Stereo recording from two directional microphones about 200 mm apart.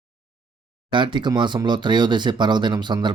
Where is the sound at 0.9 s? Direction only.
25° right (ahead or behind).